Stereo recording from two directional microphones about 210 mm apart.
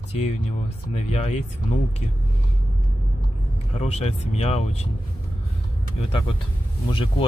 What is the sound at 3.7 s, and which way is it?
Speech, 30° left (ahead or behind).